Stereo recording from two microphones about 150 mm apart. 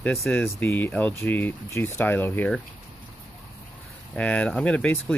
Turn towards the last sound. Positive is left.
turn(degrees=10)  # may be behind; listen again after turning